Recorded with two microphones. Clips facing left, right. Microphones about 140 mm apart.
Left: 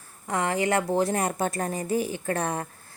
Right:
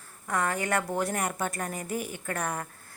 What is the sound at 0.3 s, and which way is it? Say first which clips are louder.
A woman's voice: left 4 dB; 20° left (ahead or behind).